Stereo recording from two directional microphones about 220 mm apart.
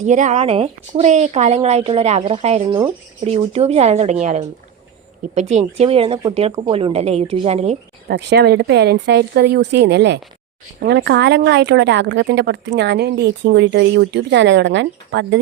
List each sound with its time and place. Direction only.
0.0 s a woman's voice: 35° right (ahead or behind)
8.0 s a woman's voice: 45° right (ahead or behind)